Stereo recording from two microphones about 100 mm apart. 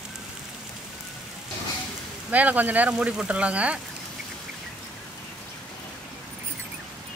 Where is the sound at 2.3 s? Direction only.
15° right (ahead or behind).